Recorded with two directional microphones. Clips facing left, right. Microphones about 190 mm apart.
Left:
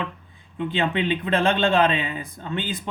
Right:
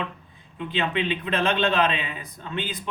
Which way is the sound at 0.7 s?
30° left (ahead or behind).